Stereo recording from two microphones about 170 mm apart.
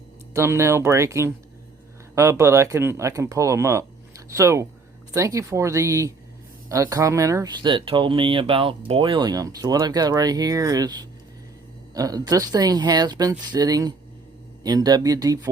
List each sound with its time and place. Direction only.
0.3 s speech: 15° right (ahead or behind)